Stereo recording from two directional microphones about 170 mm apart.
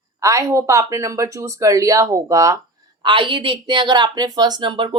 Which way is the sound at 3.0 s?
30° right (ahead or behind).